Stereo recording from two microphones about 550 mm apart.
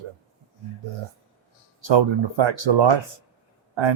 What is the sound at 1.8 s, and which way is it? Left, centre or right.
Speech, right.